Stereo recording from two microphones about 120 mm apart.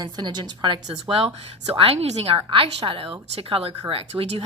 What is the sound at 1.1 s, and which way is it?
A woman's voice, 50° right (ahead or behind).